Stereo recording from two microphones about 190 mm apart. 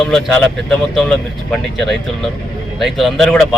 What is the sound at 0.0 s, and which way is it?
Speech, 5° left (ahead or behind).